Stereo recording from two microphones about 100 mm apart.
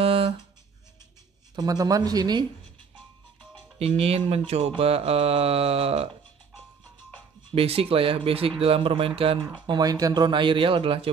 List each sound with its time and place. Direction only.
0.0 s a sound: 70° right (ahead or behind)
1.5 s speech: 40° right (ahead or behind)
3.8 s speech: 75° right (ahead or behind)
4.5 s speech: 90° right
7.5 s speech: 75° right (ahead or behind)
9.7 s speech: 40° right (ahead or behind)
10.2 s a man's voice: 55° right (ahead or behind)